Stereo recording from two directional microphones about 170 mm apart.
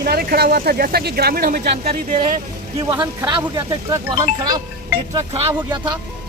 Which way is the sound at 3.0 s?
25° right (ahead or behind).